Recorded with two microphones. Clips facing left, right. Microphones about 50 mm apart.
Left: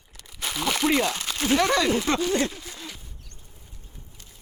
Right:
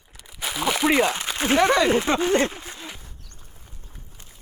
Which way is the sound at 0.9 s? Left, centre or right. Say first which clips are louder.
Right 4 dB; right.